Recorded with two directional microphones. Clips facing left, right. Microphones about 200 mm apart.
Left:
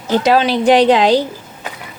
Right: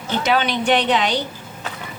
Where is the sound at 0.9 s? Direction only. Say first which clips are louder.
Left 8 dB; 90° left.